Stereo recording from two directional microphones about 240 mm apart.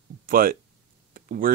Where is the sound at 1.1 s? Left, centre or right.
Right.